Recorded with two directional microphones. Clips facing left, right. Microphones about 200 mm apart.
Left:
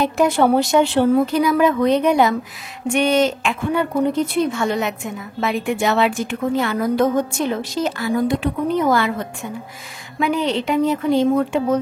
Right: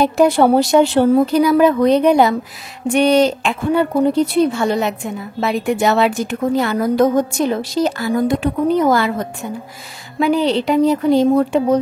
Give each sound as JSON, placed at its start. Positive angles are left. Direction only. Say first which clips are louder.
{"t": 0.0, "sound": "a woman's voice", "louder": "right 4 dB", "side_deg": -35}